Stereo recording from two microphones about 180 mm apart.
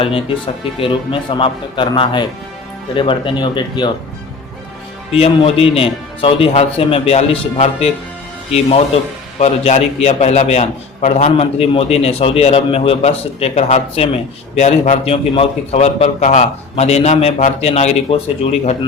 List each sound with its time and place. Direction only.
0.0 s speech: 30° left (ahead or behind)
5.1 s a man's voice: 35° left (ahead or behind)